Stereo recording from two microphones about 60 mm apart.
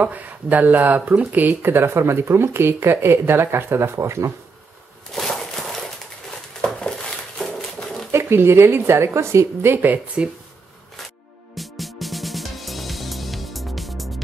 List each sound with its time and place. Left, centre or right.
0.0 s speech: right
5.1 s a sound: centre
8.1 s speech: right
9.8 s speech: centre
11.5 s music: centre